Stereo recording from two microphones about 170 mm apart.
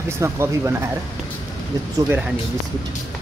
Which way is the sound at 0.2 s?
15° right (ahead or behind).